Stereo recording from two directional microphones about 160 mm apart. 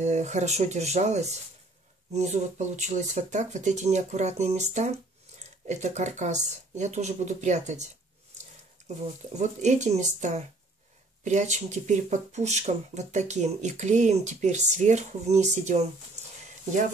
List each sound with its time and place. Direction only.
0.0 s speech: 45° right (ahead or behind)